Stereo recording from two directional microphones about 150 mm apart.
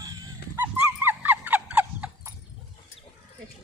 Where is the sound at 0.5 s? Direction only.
15° right (ahead or behind).